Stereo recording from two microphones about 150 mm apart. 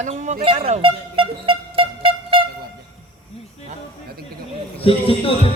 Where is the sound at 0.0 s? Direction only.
50° right (ahead or behind).